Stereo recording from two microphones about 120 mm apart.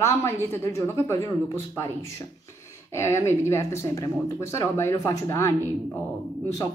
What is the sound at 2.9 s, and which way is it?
Speech, 25° left (ahead or behind).